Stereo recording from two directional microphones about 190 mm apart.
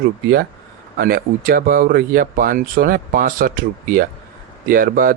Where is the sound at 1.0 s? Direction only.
50° right (ahead or behind).